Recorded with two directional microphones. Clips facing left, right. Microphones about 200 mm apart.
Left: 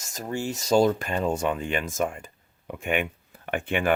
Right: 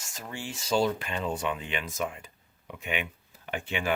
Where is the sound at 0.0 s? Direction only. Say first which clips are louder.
Left 9 dB; 40° left (ahead or behind).